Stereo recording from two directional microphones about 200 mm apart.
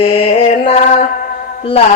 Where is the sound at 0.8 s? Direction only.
45° left (ahead or behind).